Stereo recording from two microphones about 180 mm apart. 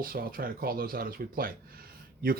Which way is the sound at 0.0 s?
55° right (ahead or behind).